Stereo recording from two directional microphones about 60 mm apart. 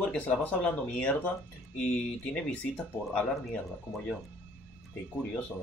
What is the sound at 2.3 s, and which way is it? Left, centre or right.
Speech, left.